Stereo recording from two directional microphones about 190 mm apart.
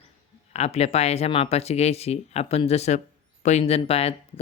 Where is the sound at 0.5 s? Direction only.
35° left (ahead or behind).